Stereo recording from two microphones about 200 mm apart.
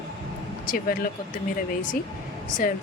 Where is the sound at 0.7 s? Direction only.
45° left (ahead or behind).